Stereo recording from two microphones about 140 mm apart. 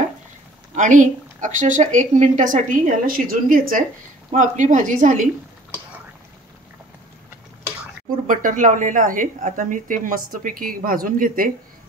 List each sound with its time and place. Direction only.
0.7 s a woman's voice: 65° right (ahead or behind); by 3.8 s 85° right
4.3 s a woman's voice: 60° right (ahead or behind)
8.3 s speech: 70° right (ahead or behind)